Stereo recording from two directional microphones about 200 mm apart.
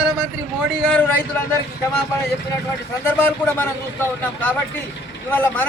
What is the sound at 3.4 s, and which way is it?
Speech, 10° left (ahead or behind).